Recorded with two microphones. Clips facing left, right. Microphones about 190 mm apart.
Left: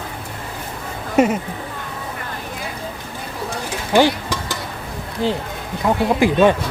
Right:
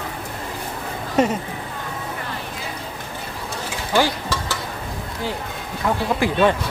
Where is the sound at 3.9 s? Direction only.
15° left (ahead or behind).